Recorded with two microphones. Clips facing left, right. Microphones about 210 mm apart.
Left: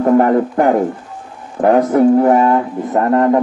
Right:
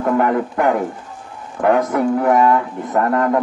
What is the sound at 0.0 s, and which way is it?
Speech, 35° left (ahead or behind).